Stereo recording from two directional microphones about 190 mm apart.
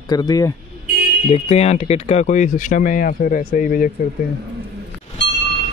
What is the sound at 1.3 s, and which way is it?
Speech, 35° left (ahead or behind).